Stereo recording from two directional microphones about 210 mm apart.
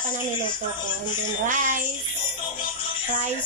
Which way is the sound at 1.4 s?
40° right (ahead or behind).